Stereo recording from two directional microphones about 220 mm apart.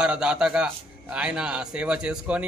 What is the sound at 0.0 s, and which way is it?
Speech, 5° right (ahead or behind).